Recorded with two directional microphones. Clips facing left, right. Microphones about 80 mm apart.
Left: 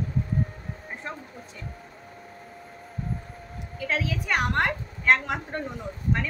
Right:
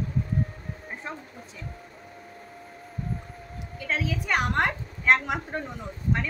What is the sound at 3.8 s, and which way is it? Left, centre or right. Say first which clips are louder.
A woman's voice: left 1 dB; centre.